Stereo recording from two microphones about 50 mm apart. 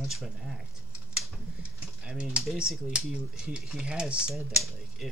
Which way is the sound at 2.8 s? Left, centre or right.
Centre.